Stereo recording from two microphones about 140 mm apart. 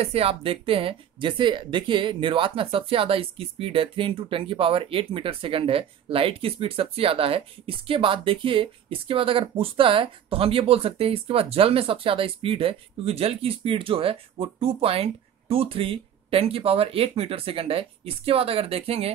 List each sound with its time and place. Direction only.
0.0 s speech: 45° right (ahead or behind)